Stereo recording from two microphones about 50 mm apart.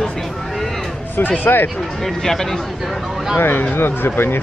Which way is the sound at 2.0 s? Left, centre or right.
Centre.